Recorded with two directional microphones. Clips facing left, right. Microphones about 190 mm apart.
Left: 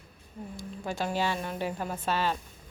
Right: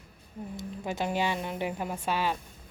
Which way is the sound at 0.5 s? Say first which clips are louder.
Right 1 dB; 20° right (ahead or behind).